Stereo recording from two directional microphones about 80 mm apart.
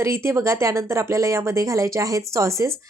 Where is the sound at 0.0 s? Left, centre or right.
Right.